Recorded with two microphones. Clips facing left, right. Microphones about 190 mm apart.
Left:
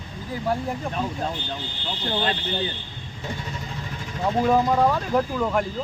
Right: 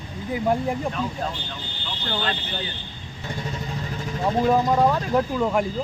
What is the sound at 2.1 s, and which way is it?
Speech, 25° left (ahead or behind).